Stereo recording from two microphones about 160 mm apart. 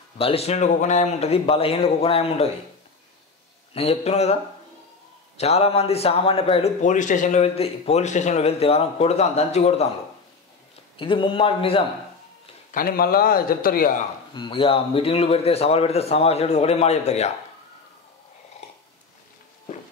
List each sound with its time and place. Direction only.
0.2 s speech: 40° left (ahead or behind)
3.7 s speech: 40° left (ahead or behind)
5.4 s speech: 40° left (ahead or behind)
6.8 s a man's voice: 50° left (ahead or behind)
11.0 s speech: 30° left (ahead or behind)
12.7 s a man's voice: 65° left (ahead or behind)
14.3 s speech: 30° left (ahead or behind)